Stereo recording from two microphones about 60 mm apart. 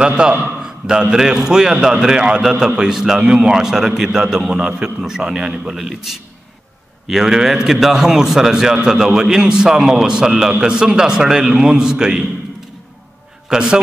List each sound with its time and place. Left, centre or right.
0.0 s a man's voice: centre
0.6 s a sound: centre
1.1 s a man's voice: centre
13.5 s a man's voice: centre